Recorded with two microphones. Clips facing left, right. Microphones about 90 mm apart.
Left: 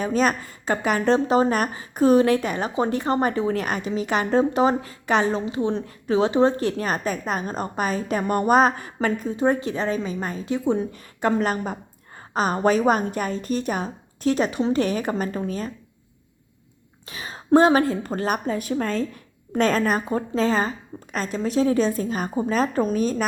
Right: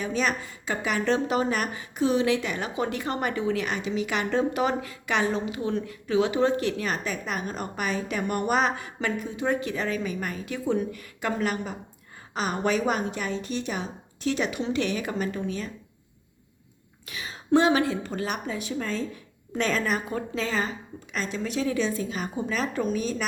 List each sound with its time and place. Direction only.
0.0 s a woman's voice: 45° left (ahead or behind)
17.1 s a woman's voice: 35° left (ahead or behind)